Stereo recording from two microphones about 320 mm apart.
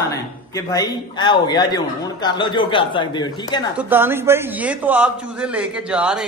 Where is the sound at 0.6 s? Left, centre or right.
Centre.